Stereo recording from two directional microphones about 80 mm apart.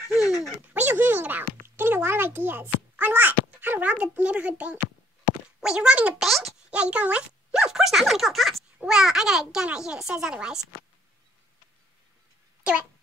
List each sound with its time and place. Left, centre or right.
0.1 s dog: centre
0.7 s a child's voice: right
6.1 s speech: centre
6.7 s a child's voice: centre